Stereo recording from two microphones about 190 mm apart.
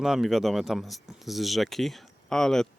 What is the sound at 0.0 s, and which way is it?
Speech, centre (ahead or behind).